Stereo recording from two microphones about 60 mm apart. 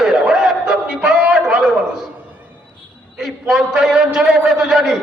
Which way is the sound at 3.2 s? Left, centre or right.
Centre.